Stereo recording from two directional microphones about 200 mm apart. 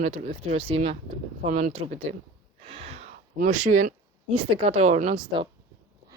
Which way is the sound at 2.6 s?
30° right (ahead or behind).